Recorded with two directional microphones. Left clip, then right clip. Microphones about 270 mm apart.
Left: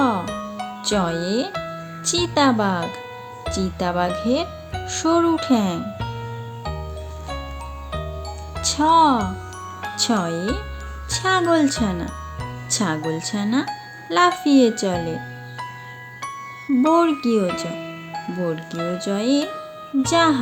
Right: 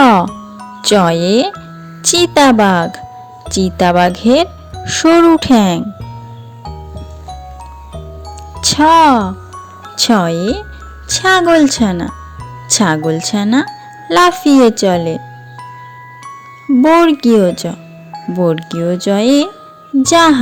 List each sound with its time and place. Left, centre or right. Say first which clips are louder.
0.0 s music: right 13 dB; right
0.8 s speech: right 12 dB; right
8.6 s speech: right 8 dB; right
16.7 s speech: right 9 dB; right